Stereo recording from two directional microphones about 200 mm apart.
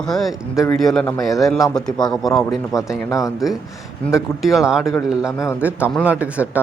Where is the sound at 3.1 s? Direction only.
15° left (ahead or behind).